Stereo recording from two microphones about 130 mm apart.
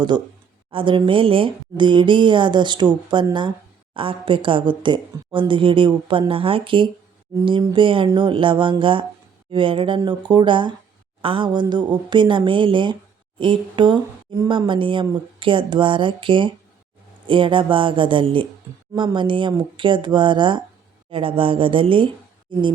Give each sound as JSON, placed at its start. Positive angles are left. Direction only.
{"t": 0.1, "sound": "speech", "side_deg": -35}